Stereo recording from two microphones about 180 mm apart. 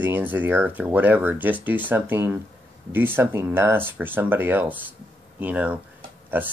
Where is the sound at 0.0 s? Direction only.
10° right (ahead or behind).